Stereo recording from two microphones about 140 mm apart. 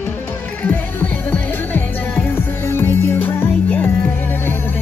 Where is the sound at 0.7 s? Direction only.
15° left (ahead or behind).